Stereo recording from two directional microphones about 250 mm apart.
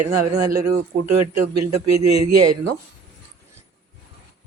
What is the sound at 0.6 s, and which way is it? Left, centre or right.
A man's voice, right.